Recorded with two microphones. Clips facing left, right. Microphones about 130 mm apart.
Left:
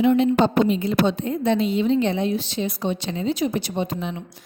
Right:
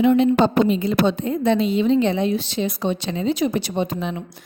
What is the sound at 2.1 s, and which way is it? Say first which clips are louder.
A woman's voice: right 2 dB; 90° right.